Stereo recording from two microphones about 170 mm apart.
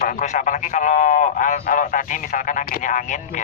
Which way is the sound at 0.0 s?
50° left (ahead or behind).